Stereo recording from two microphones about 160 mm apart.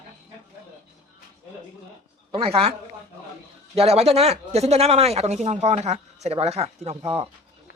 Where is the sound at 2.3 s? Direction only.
35° right (ahead or behind).